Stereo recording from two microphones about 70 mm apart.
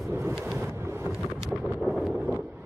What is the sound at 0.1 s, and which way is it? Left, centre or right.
Wind noise, right.